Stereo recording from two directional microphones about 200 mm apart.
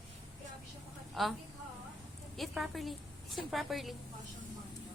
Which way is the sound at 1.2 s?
Centre (ahead or behind).